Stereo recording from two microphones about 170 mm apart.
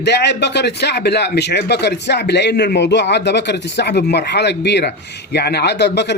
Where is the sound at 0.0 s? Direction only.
85° left.